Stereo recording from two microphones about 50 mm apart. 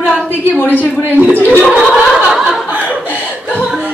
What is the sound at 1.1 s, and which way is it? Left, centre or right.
Speech, right.